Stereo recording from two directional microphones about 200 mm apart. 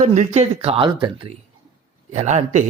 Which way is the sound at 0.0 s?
35° right (ahead or behind).